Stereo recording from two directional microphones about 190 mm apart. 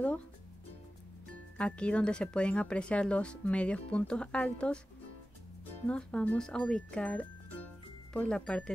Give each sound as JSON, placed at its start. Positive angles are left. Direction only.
{"t": 1.6, "sound": "speech", "side_deg": 5}
{"t": 5.9, "sound": "speech", "side_deg": 5}